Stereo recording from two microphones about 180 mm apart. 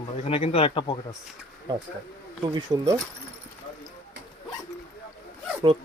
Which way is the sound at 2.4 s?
20° right (ahead or behind).